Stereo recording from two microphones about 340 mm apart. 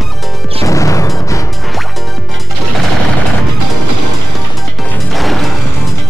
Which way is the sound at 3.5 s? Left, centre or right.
Right.